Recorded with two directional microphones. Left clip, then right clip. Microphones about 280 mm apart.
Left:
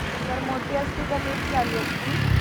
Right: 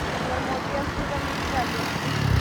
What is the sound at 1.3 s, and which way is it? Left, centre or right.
Vehicle, right.